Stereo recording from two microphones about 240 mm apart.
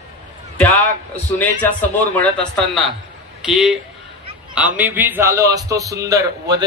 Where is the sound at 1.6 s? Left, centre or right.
Centre.